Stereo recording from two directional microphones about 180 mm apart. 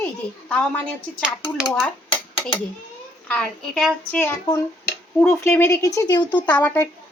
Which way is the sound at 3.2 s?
5° left (ahead or behind).